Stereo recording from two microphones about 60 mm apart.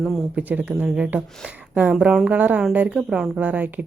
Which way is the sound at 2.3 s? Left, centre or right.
Right.